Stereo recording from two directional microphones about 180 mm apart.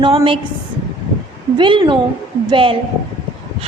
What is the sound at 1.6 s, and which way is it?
A woman's voice, 25° right (ahead or behind).